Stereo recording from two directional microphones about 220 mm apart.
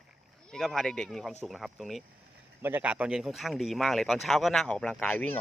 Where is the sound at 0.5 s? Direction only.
Centre (ahead or behind).